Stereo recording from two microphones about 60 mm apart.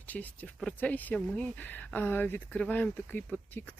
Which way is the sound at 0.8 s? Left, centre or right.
Left.